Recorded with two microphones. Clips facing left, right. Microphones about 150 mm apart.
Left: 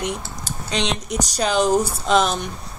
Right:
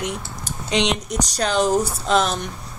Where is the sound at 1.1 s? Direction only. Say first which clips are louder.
Left 1 dB; 5° left (ahead or behind).